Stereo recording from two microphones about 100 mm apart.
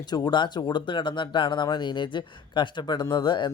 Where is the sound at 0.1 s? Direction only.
50° left (ahead or behind).